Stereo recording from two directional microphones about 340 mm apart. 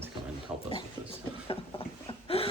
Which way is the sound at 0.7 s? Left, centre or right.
Centre.